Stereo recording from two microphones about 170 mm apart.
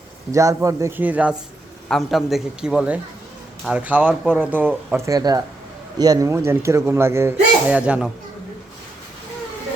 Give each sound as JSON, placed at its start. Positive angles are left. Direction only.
{"t": 0.3, "sound": "a man's voice", "side_deg": -20}
{"t": 5.0, "sound": "speech", "side_deg": -20}